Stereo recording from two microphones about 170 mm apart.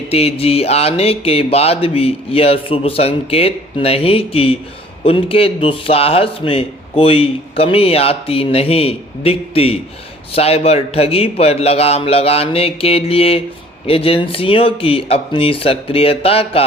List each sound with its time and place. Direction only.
0.1 s a man's voice: 35° left (ahead or behind)